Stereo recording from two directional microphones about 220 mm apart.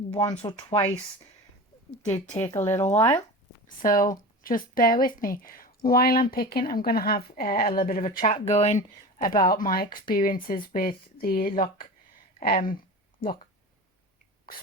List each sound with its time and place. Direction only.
0.1 s speech: 20° left (ahead or behind)
2.4 s speech: 15° left (ahead or behind)
3.8 s speech: 40° left (ahead or behind)